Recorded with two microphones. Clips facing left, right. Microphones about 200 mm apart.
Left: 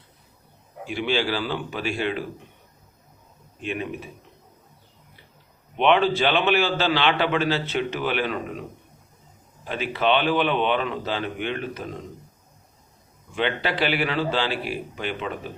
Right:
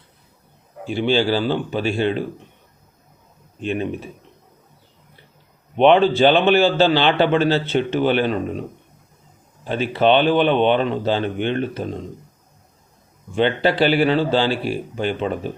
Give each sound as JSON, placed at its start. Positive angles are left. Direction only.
{"t": 0.9, "sound": "a man's voice", "side_deg": -30}
{"t": 3.6, "sound": "speech", "side_deg": -30}
{"t": 5.7, "sound": "a man's voice", "side_deg": -35}
{"t": 9.6, "sound": "speech", "side_deg": -30}
{"t": 13.3, "sound": "speech", "side_deg": -30}